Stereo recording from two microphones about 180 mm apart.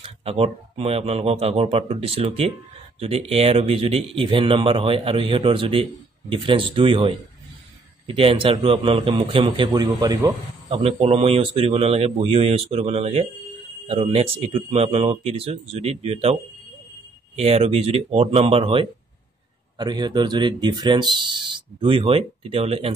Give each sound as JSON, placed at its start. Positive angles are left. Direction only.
{"t": 0.0, "sound": "speech", "side_deg": -30}
{"t": 10.8, "sound": "speech", "side_deg": -35}
{"t": 17.4, "sound": "speech", "side_deg": -35}